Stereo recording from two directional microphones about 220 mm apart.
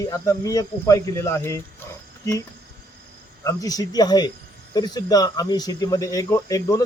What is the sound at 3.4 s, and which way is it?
Speech, 15° left (ahead or behind).